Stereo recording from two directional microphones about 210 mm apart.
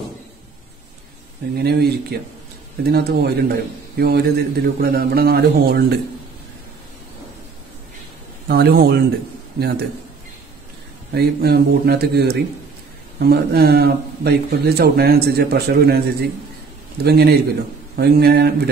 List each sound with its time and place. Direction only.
1.6 s a man's voice: 50° right (ahead or behind)
8.5 s a man's voice: 45° right (ahead or behind)
11.1 s a man's voice: 50° right (ahead or behind)